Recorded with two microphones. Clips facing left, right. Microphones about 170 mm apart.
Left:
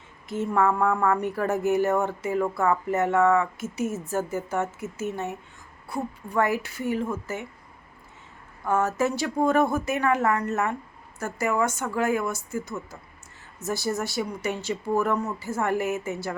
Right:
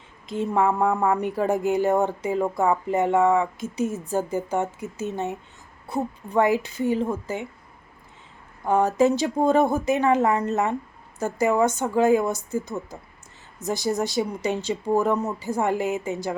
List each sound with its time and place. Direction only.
0.3 s a woman's voice: 20° right (ahead or behind)
8.6 s a woman's voice: 15° right (ahead or behind)